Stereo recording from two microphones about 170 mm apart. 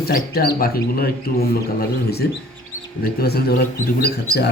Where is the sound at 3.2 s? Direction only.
70° left (ahead or behind).